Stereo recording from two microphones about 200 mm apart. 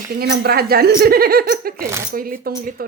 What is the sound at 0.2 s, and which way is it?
A woman's voice, 50° right (ahead or behind).